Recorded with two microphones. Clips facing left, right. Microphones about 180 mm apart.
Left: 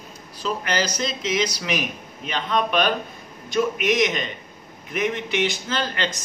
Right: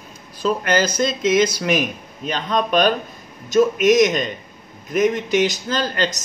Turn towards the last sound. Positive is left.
turn(degrees=-40)  # may be behind; listen again after turning